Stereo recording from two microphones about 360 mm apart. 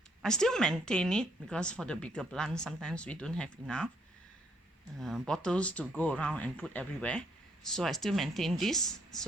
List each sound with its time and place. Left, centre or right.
0.2 s speech: centre
4.9 s speech: centre